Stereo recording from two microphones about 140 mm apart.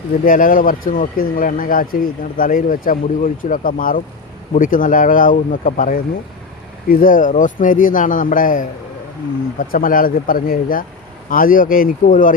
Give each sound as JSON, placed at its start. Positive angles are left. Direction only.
{"t": 0.3, "sound": "speech", "side_deg": 85}
{"t": 6.8, "sound": "speech", "side_deg": 85}